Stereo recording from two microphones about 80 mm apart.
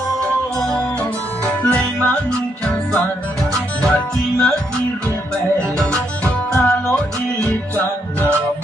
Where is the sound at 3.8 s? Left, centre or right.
Centre.